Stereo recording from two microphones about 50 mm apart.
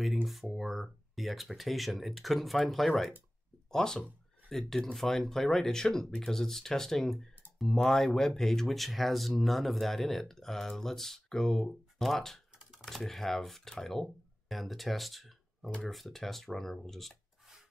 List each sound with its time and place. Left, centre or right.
0.0 s speech: centre